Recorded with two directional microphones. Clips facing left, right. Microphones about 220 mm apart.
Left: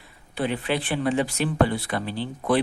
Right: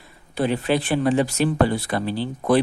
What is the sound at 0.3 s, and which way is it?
Speech, 40° right (ahead or behind).